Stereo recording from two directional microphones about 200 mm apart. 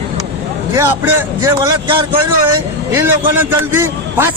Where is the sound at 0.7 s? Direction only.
10° right (ahead or behind).